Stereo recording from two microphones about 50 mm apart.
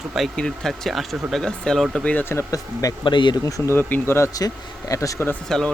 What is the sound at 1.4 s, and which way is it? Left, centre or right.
Speech, centre.